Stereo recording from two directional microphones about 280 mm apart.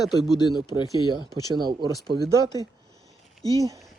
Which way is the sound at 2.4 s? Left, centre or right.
Centre.